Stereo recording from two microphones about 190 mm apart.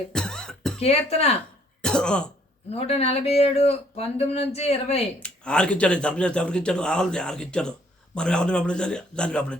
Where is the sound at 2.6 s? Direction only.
35° left (ahead or behind).